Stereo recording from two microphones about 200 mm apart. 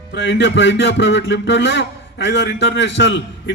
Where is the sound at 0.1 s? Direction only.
60° left (ahead or behind).